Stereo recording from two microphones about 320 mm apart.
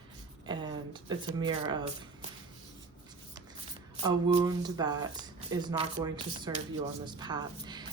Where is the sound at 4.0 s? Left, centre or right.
Centre.